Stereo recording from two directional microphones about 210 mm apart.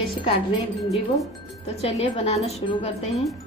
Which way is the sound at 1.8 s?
30° left (ahead or behind).